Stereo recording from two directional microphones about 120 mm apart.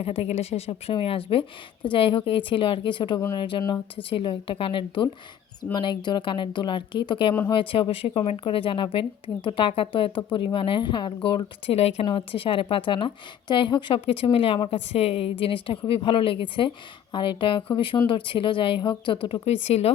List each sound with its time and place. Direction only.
0.0 s a woman's voice: 55° left (ahead or behind)
12.0 s a woman's voice: 45° left (ahead or behind)
19.5 s speech: 60° left (ahead or behind)